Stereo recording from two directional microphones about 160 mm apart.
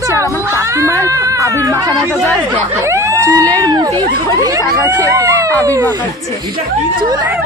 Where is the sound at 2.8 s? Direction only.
20° right (ahead or behind).